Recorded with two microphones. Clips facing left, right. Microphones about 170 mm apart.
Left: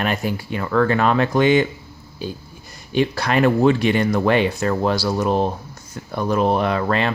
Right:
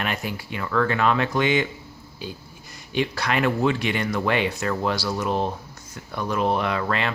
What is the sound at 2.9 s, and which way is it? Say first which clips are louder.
Speech: left 5 dB; 35° left (ahead or behind).